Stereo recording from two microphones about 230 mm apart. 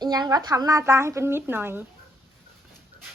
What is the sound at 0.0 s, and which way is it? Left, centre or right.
A woman's voice, centre.